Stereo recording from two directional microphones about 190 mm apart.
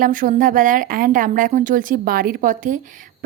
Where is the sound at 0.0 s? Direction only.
45° right (ahead or behind).